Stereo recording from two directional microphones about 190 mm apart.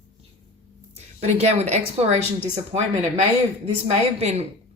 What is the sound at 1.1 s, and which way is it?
Speech, 35° right (ahead or behind).